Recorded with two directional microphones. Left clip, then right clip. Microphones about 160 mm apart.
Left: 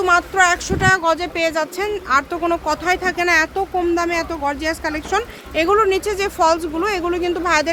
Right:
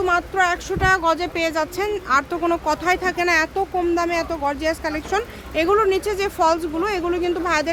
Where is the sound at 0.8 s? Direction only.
5° right (ahead or behind).